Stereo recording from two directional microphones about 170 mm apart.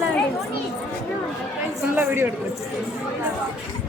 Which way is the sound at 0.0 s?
5° left (ahead or behind).